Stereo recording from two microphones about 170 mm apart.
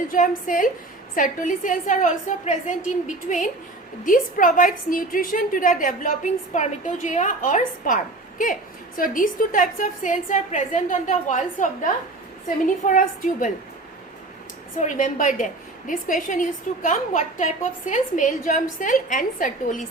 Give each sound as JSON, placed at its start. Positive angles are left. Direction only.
{"t": 0.1, "sound": "a woman's voice", "side_deg": 50}
{"t": 9.1, "sound": "a woman's voice", "side_deg": 50}
{"t": 14.8, "sound": "a woman's voice", "side_deg": 45}